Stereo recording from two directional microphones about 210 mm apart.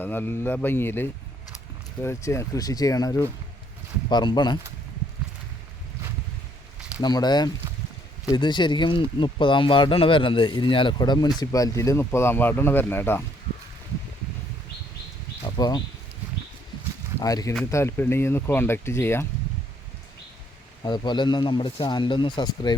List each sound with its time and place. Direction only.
0.0 s a man's voice: 10° left (ahead or behind)
7.0 s a man's voice: 20° left (ahead or behind)
15.5 s speech: 20° left (ahead or behind)
17.2 s speech: 15° left (ahead or behind)
20.8 s a man's voice: 20° left (ahead or behind)